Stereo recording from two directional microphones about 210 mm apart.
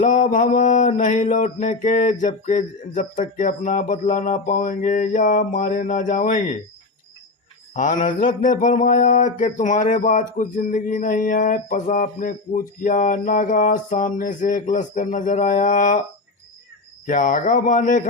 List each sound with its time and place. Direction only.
0.0 s mantra: 40° left (ahead or behind)
7.7 s mantra: 35° left (ahead or behind)
17.1 s mantra: 35° left (ahead or behind)